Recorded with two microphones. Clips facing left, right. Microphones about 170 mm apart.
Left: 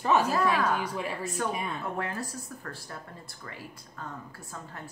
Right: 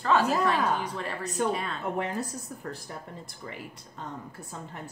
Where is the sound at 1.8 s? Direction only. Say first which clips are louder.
Right 3 dB; 20° right (ahead or behind).